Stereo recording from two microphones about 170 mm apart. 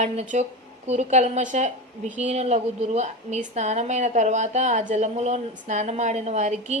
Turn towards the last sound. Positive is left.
turn(degrees=-40)  # may be behind; listen again after turning